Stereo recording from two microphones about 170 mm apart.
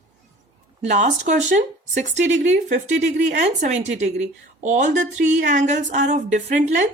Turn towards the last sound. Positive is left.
turn(degrees=-45)  # may be behind; listen again after turning